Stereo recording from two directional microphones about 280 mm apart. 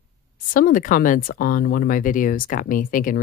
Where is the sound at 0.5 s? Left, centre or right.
Left.